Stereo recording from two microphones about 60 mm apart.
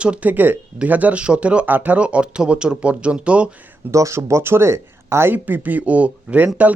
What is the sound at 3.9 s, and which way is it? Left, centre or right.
Speech, right.